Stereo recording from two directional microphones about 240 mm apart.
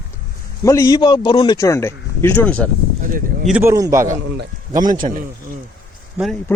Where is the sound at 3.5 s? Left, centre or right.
Centre.